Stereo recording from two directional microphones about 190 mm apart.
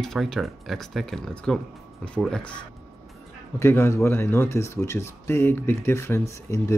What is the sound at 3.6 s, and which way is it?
Speech, 15° left (ahead or behind).